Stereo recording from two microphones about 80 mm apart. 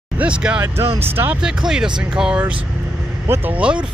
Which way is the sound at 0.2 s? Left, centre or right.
Centre.